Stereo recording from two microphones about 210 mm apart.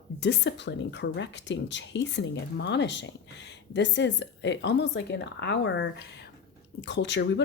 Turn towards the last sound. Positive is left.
turn(degrees=55)  # may be behind; listen again after turning